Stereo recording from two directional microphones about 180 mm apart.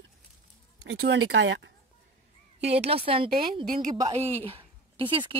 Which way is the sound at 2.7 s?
30° right (ahead or behind).